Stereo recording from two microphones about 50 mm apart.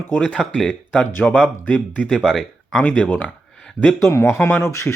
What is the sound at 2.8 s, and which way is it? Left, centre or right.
Speech, left.